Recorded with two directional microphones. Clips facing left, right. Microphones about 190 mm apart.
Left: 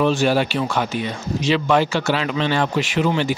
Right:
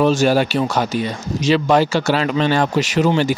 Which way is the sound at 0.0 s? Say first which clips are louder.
Right 3 dB; 40° right (ahead or behind).